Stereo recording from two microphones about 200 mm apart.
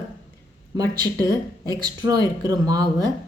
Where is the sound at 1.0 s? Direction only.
20° right (ahead or behind).